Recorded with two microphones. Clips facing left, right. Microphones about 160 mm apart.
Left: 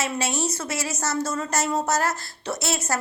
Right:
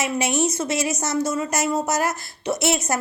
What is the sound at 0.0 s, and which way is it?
A woman's voice, 15° right (ahead or behind).